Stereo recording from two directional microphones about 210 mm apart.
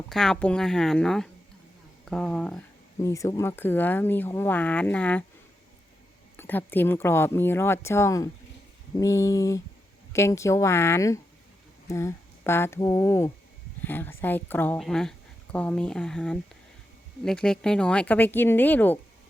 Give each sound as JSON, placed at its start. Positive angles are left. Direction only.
{"t": 0.1, "sound": "a woman's voice", "side_deg": 0}
{"t": 3.0, "sound": "speech", "side_deg": 15}
{"t": 6.3, "sound": "a woman's voice", "side_deg": 10}